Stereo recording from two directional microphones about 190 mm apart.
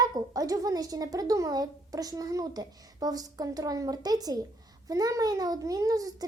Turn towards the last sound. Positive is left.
turn(degrees=-20)  # may be behind; listen again after turning